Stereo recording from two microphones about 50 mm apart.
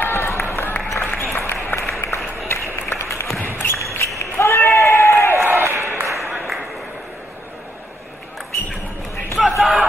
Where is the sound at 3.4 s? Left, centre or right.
Left.